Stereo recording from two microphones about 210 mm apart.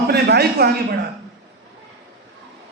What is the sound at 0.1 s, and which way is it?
Speech, 50° right (ahead or behind).